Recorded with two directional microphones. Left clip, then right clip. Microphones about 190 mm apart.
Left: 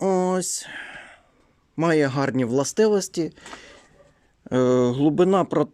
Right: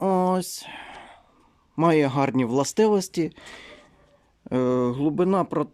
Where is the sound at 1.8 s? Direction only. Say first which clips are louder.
Even; 15° right (ahead or behind).